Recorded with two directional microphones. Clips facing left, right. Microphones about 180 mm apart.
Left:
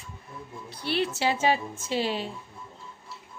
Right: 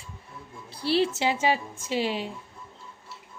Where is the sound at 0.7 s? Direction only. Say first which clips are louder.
Right 4 dB; 30° right (ahead or behind).